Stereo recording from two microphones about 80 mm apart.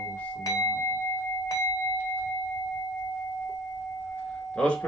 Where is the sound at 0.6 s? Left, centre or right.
Left.